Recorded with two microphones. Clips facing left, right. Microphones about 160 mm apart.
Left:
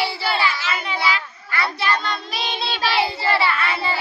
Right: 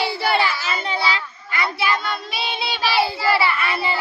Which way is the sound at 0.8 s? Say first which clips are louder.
Even; 25° right (ahead or behind).